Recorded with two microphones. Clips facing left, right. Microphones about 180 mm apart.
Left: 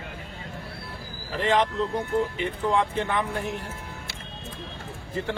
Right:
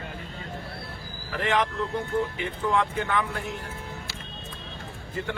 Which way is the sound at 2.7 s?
25° left (ahead or behind).